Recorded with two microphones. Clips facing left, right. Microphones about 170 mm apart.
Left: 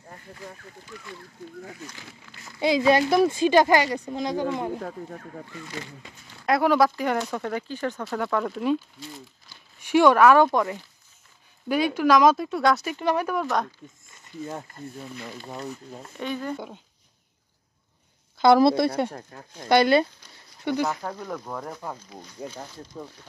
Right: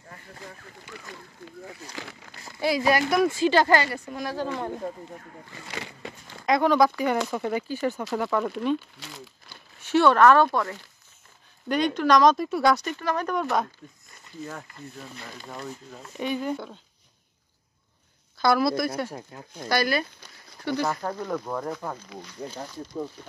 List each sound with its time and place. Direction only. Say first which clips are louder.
2.6 s speech: left 3 dB; 20° left (ahead or behind)
5.7 s speech: right 1 dB; 85° right
6.4 s speech: even; 5° left (ahead or behind)
9.0 s speech: left 2 dB; 80° right
9.8 s speech: left 2 dB; 15° left (ahead or behind)
12.9 s speech: left 2 dB; 15° left (ahead or behind)
14.1 s wild animals: left 3 dB; 25° left (ahead or behind)
15.4 s speech: even; 20° left (ahead or behind)
16.2 s speech: right 2 dB; 15° right (ahead or behind)
16.5 s speech: even; 15° left (ahead or behind)
18.4 s speech: left 5 dB; 25° left (ahead or behind)
19.0 s speech: left 1 dB; 5° right (ahead or behind)
19.7 s speech: left 7 dB; 25° left (ahead or behind)
20.9 s speech: right 3 dB; 5° left (ahead or behind)